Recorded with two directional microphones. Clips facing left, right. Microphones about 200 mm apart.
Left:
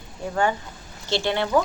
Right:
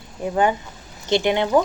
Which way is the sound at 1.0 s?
20° right (ahead or behind).